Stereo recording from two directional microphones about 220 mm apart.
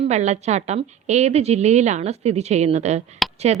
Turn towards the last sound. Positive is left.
turn(degrees=-30)  # may be behind; listen again after turning